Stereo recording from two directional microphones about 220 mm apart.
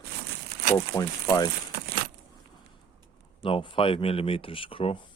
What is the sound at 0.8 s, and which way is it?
Speech, 15° left (ahead or behind).